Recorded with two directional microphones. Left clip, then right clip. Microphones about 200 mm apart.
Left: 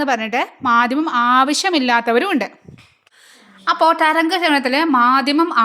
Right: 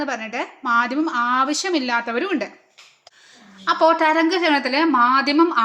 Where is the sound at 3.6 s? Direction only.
30° left (ahead or behind).